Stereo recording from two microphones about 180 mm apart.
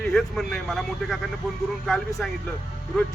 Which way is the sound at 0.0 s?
Centre (ahead or behind).